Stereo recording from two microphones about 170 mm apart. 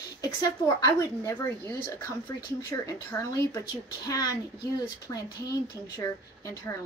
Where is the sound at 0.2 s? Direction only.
20° left (ahead or behind).